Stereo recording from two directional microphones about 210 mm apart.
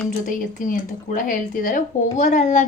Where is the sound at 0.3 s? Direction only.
40° left (ahead or behind).